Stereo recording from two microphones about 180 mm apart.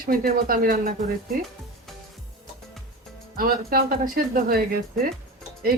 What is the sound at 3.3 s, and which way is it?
Speech, 55° right (ahead or behind).